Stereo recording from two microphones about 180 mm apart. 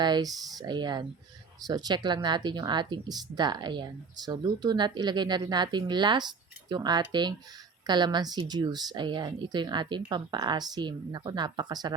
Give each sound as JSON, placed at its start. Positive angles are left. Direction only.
{"t": 0.0, "sound": "speech", "side_deg": -20}